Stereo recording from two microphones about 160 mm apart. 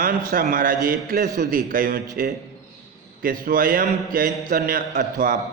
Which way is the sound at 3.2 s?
60° right (ahead or behind).